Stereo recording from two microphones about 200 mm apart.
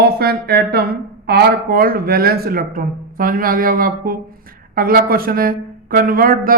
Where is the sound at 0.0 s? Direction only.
50° right (ahead or behind).